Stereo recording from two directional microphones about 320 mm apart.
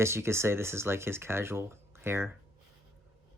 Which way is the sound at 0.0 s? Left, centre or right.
Centre.